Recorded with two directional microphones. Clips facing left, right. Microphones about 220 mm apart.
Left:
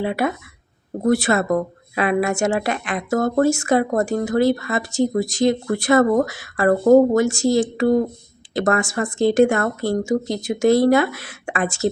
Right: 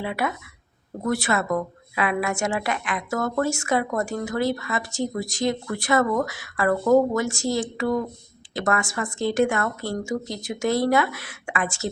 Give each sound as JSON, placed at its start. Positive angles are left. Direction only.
{"t": 0.0, "sound": "speech", "side_deg": 35}